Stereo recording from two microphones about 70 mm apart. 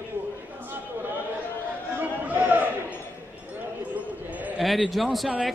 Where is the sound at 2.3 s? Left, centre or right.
Right.